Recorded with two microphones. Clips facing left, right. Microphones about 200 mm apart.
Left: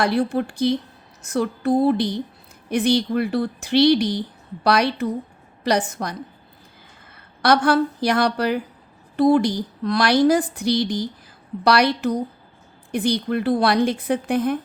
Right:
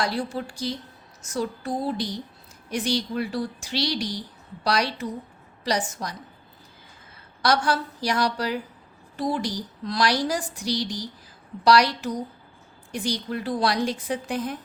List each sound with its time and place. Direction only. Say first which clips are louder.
0.0 s a woman's voice: left 7 dB; 60° left (ahead or behind)
7.4 s a woman's voice: left 6 dB; 60° left (ahead or behind)